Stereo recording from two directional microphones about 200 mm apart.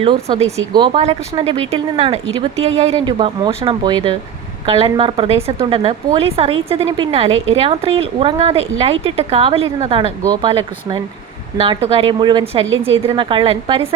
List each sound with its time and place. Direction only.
0.0 s speech: 30° right (ahead or behind)
2.9 s speech: 20° right (ahead or behind)